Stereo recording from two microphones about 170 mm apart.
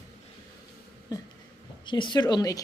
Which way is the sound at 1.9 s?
30° left (ahead or behind).